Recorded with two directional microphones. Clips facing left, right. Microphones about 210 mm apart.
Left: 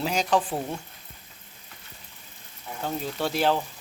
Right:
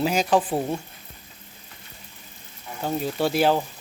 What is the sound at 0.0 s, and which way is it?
Speech, 5° right (ahead or behind).